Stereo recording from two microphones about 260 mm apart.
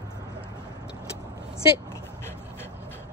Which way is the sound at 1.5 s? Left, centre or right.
Centre.